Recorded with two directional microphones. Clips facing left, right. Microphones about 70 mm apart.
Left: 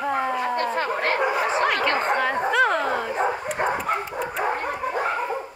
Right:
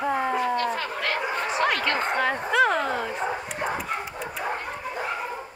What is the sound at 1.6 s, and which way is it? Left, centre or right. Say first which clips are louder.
Speech: left 2 dB; centre.